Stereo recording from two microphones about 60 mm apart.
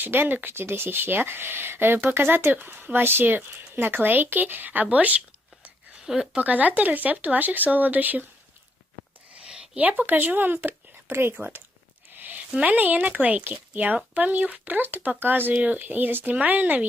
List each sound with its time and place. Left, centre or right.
0.0 s speech: right
6.1 s speech: centre
6.4 s speech: right
9.3 s a sound: centre
9.8 s speech: right
11.3 s speech: right
12.2 s a sound: right
12.6 s speech: right